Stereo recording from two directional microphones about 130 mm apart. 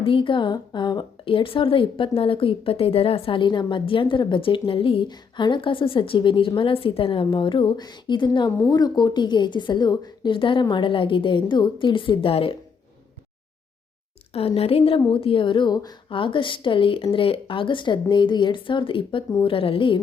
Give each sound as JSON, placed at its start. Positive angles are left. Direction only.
{"t": 0.0, "sound": "a woman's voice", "side_deg": 45}
{"t": 14.3, "sound": "a woman's voice", "side_deg": 50}